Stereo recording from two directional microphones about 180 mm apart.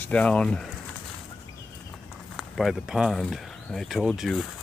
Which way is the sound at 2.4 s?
Centre (ahead or behind).